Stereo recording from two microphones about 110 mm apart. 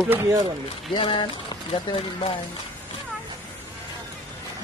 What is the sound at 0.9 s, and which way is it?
Speech, 45° left (ahead or behind).